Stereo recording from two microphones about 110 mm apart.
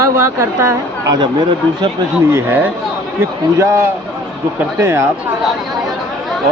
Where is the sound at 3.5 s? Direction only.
25° right (ahead or behind).